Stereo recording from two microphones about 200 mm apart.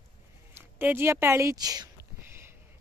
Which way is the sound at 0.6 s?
10° right (ahead or behind).